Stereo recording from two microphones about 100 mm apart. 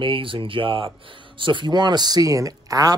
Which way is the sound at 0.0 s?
60° right (ahead or behind).